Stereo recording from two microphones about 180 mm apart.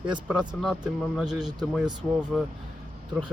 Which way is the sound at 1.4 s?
25° right (ahead or behind).